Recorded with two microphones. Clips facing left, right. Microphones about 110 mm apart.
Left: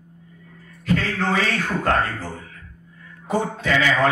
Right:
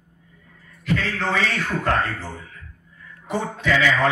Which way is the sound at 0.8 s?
40° left (ahead or behind).